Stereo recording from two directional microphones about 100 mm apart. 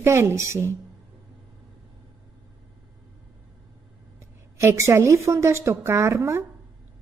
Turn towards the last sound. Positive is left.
turn(degrees=-30)  # may be behind; listen again after turning